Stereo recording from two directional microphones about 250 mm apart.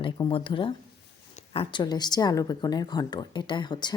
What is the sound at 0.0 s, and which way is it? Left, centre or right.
Speech, left.